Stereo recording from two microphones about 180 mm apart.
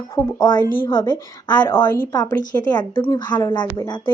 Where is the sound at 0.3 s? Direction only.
25° left (ahead or behind).